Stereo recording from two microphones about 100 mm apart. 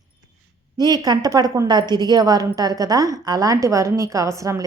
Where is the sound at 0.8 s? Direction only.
45° right (ahead or behind).